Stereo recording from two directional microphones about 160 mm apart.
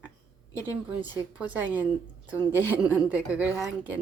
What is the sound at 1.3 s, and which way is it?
A woman's voice, 10° right (ahead or behind).